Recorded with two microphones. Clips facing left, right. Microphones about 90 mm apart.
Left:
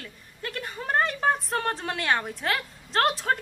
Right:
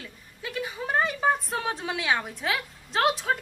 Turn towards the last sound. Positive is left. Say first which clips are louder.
# even
turn(degrees=0)  # may be behind; listen again after turning